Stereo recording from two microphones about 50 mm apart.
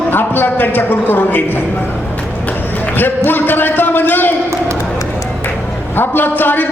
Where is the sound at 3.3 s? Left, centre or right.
Left.